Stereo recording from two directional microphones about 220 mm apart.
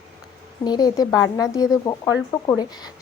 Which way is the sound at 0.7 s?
20° left (ahead or behind).